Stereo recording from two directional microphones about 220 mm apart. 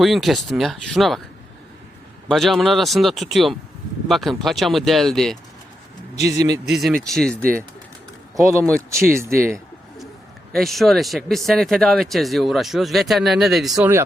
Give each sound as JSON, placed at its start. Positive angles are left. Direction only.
{"t": 0.0, "sound": "speech", "side_deg": 0}
{"t": 2.2, "sound": "speech", "side_deg": 0}
{"t": 6.1, "sound": "speech", "side_deg": -15}
{"t": 6.7, "sound": "speech", "side_deg": 0}
{"t": 8.4, "sound": "speech", "side_deg": -15}
{"t": 10.5, "sound": "speech", "side_deg": 0}